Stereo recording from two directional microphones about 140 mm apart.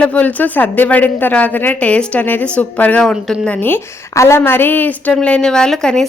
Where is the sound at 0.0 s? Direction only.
10° left (ahead or behind).